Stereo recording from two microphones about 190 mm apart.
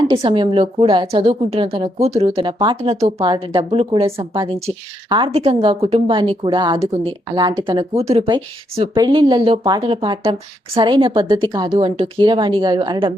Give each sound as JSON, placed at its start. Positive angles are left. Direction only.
{"t": 0.1, "sound": "a woman's voice", "side_deg": -25}